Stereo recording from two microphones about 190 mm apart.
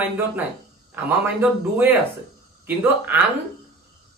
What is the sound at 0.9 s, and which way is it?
Speech, 10° right (ahead or behind).